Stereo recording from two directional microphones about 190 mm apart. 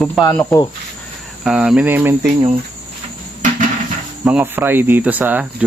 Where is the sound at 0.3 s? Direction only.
15° left (ahead or behind).